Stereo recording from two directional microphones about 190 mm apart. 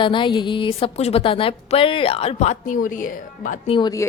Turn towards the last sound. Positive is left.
turn(degrees=20)  # may be behind; listen again after turning